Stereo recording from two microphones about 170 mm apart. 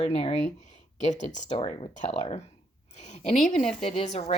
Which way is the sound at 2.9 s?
45° left (ahead or behind).